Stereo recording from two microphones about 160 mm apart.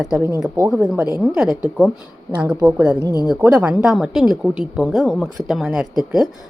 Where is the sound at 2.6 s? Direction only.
10° right (ahead or behind).